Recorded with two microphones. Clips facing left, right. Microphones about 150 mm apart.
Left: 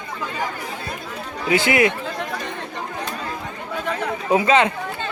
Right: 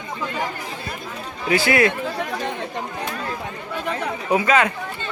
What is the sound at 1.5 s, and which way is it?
Speech, 20° left (ahead or behind).